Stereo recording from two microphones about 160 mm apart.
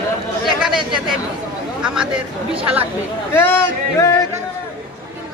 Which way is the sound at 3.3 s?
15° left (ahead or behind).